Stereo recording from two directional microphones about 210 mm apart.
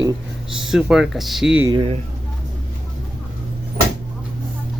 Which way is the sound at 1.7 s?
25° right (ahead or behind).